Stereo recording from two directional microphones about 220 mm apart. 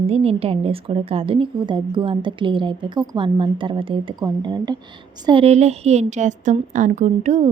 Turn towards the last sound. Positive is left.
turn(degrees=-30)  # may be behind; listen again after turning